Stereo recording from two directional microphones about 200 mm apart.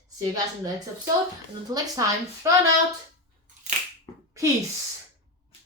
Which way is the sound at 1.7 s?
15° right (ahead or behind).